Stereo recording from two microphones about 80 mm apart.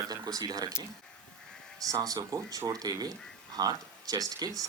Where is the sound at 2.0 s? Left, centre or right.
Right.